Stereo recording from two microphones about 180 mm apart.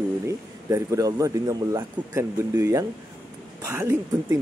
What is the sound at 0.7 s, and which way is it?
Speech, 20° right (ahead or behind).